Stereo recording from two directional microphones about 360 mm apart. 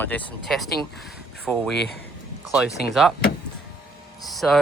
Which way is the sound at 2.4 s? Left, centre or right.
Centre.